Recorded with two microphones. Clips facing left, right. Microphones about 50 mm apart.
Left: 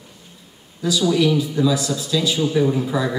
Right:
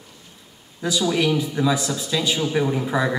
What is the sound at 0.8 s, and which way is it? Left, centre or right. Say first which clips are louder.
A man's voice: left 3 dB; right.